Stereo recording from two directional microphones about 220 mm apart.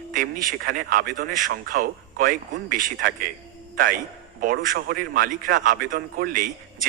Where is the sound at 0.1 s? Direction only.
40° right (ahead or behind).